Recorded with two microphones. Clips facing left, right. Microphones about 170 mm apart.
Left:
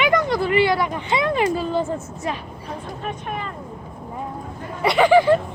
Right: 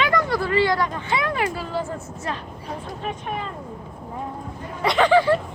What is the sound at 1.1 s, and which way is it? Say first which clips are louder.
Speech: left 6 dB; 20° left (ahead or behind).